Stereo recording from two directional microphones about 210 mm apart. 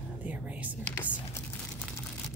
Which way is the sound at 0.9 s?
10° left (ahead or behind).